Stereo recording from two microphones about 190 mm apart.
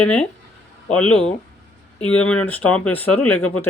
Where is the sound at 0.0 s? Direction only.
5° left (ahead or behind).